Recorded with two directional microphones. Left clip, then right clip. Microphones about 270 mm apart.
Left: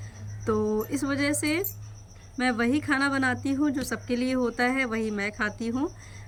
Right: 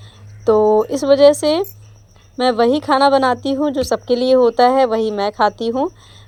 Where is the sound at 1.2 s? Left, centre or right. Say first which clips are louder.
Right 16 dB; right.